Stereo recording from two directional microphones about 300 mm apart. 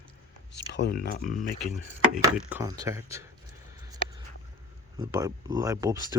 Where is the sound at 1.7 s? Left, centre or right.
Centre.